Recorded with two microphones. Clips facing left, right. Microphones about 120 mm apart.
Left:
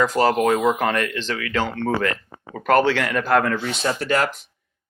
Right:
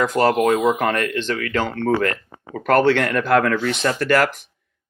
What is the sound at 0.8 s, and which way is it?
Speech, 45° right (ahead or behind).